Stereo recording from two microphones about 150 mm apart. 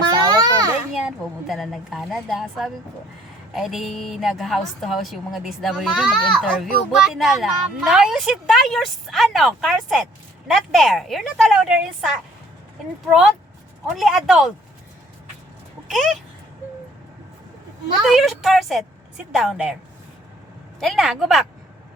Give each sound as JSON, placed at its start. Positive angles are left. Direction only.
{"t": 0.3, "sound": "children playing", "side_deg": -25}
{"t": 0.9, "sound": "a woman's voice", "side_deg": 0}
{"t": 15.9, "sound": "a woman's voice", "side_deg": 0}
{"t": 18.0, "sound": "a woman's voice", "side_deg": 0}
{"t": 20.7, "sound": "a woman's voice", "side_deg": 0}